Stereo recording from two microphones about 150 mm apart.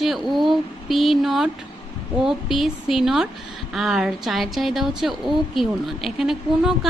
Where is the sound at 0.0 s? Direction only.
Centre (ahead or behind).